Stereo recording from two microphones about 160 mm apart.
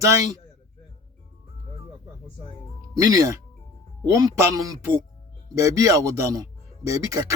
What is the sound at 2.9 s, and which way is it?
A man's voice, 20° right (ahead or behind).